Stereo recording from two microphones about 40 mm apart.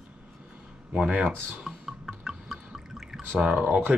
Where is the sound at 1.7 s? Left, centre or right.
Centre.